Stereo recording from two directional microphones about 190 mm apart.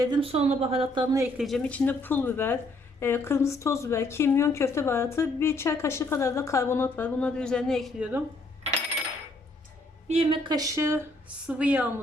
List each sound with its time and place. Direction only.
0.0 s speech: 25° right (ahead or behind)
1.4 s speech: centre (ahead or behind)
10.1 s speech: 30° right (ahead or behind); by 11.9 s 5° right (ahead or behind)